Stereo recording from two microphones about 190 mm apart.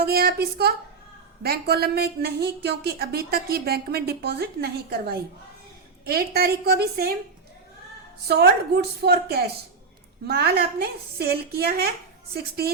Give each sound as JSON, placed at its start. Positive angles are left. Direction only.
{"t": 0.0, "sound": "speech", "side_deg": -55}
{"t": 8.3, "sound": "speech", "side_deg": -60}